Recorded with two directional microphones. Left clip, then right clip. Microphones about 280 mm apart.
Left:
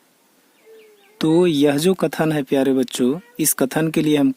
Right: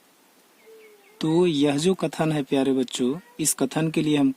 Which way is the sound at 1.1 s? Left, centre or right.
Left.